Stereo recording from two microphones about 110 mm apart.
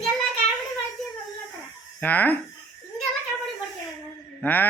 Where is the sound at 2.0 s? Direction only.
15° left (ahead or behind).